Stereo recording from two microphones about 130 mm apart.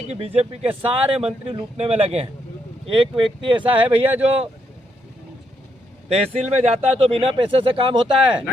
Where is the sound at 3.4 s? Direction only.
40° right (ahead or behind).